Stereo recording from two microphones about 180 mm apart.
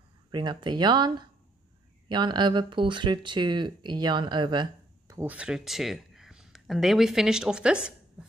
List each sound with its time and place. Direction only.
0.3 s speech: 25° right (ahead or behind); by 7.9 s 5° right (ahead or behind)
8.2 s typewriter: 5° right (ahead or behind)